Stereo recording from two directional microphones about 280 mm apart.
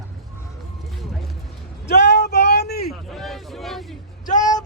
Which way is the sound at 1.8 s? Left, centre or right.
Left.